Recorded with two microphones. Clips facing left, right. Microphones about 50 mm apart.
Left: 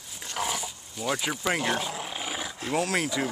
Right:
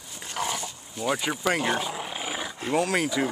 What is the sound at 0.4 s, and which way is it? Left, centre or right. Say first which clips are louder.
Wild animals: right 1 dB; centre.